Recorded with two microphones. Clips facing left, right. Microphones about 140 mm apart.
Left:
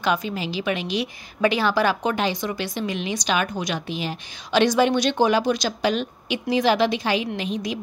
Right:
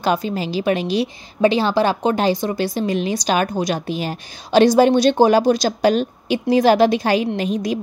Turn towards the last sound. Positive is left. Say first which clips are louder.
# right 6 dB
turn(degrees=-40)  # may be behind; listen again after turning